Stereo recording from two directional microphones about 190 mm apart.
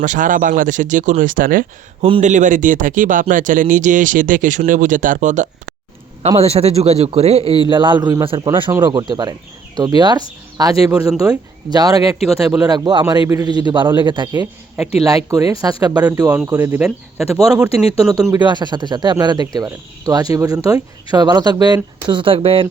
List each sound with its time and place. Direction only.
0.0 s speech: 40° right (ahead or behind)
2.0 s speech: 30° right (ahead or behind)
2.3 s a man's voice: 40° right (ahead or behind); by 17.2 s 5° right (ahead or behind)
17.3 s speech: 15° right (ahead or behind)